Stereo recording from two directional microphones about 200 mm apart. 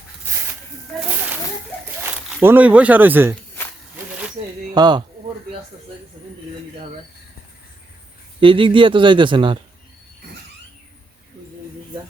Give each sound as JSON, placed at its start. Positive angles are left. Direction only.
{"t": 2.4, "sound": "speech", "side_deg": -10}
{"t": 4.7, "sound": "speech", "side_deg": -20}
{"t": 8.4, "sound": "speech", "side_deg": -25}